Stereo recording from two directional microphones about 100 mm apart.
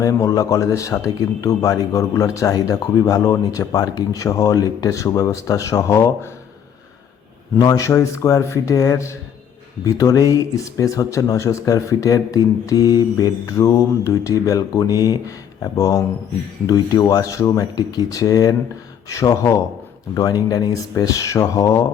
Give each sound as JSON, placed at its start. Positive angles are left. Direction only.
{"t": 0.0, "sound": "speech", "side_deg": 35}
{"t": 7.6, "sound": "speech", "side_deg": 35}